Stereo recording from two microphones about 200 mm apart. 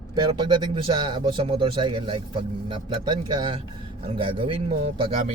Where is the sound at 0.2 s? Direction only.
20° right (ahead or behind).